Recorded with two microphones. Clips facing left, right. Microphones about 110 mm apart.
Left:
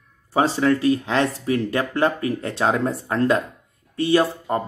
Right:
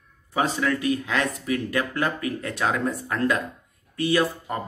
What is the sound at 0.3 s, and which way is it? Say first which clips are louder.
Speech: left 5 dB; 30° left (ahead or behind).